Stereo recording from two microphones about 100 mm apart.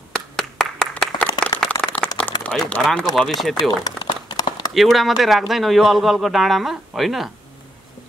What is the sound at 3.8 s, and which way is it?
Crumpling, 45° left (ahead or behind).